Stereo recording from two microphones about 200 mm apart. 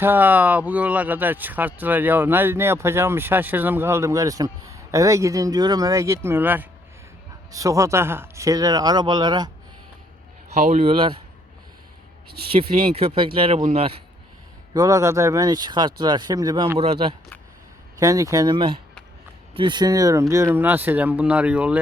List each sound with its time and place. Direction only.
0.0 s speech: 10° right (ahead or behind)
10.6 s speech: 35° right (ahead or behind)
12.5 s speech: 30° right (ahead or behind)
14.7 s speech: 20° right (ahead or behind)
17.9 s speech: 15° right (ahead or behind)